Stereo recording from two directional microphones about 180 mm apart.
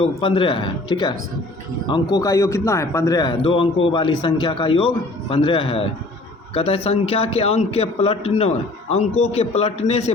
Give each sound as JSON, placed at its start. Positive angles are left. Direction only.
{"t": 0.0, "sound": "a man's voice", "side_deg": 30}